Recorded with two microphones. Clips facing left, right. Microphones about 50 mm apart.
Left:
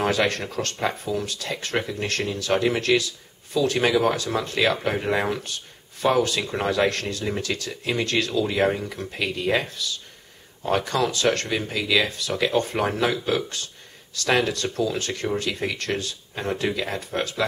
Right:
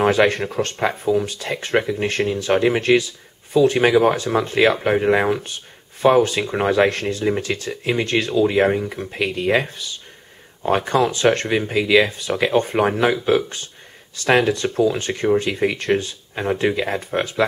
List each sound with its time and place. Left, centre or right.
0.0 s speech: right